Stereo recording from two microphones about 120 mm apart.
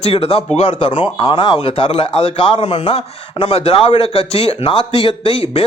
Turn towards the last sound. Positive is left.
turn(degrees=55)  # may be behind; listen again after turning